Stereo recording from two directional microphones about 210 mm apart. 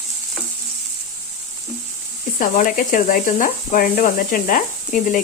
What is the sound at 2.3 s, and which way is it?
Speech, 40° left (ahead or behind).